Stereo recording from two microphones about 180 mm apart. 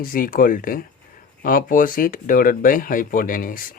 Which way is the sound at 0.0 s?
50° left (ahead or behind).